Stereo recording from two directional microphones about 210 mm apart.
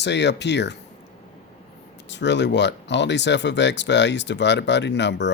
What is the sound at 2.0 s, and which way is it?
Speech, 55° left (ahead or behind).